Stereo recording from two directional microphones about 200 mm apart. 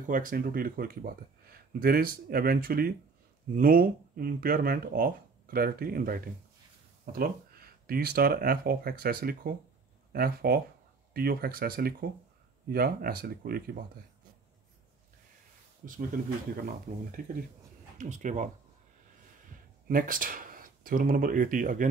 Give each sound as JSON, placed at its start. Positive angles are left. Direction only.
{"t": 0.0, "sound": "speech", "side_deg": -40}
{"t": 17.2, "sound": "speech", "side_deg": -45}
{"t": 19.9, "sound": "speech", "side_deg": -45}